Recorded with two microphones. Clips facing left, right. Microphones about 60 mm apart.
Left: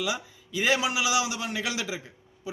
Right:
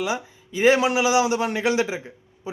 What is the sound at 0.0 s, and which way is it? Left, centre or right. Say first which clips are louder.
A man's voice: right 5 dB; right.